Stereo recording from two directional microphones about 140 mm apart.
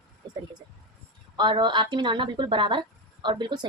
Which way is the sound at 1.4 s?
35° right (ahead or behind).